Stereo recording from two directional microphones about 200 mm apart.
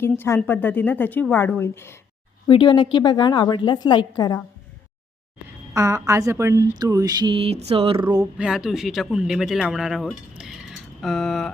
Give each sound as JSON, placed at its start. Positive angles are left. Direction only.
{"t": 0.0, "sound": "a woman's voice", "side_deg": 10}
{"t": 2.5, "sound": "a woman's voice", "side_deg": 25}
{"t": 5.7, "sound": "speech", "side_deg": -15}
{"t": 8.4, "sound": "speech", "side_deg": -5}